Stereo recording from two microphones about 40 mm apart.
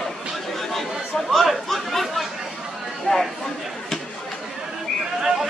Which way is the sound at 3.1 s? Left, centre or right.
Left.